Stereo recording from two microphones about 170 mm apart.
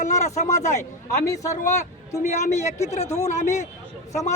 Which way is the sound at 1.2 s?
20° left (ahead or behind).